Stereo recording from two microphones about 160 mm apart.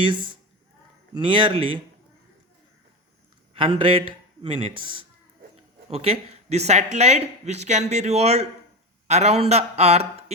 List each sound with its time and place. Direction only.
1.1 s a man's voice: 30° right (ahead or behind)
3.5 s a man's voice: 35° right (ahead or behind)